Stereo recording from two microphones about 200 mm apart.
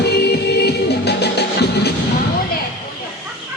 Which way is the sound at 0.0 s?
55° left (ahead or behind).